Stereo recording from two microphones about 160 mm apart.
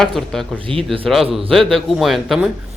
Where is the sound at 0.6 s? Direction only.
35° right (ahead or behind).